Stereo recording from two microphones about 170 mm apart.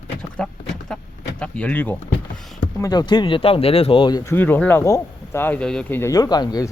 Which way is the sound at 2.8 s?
25° left (ahead or behind).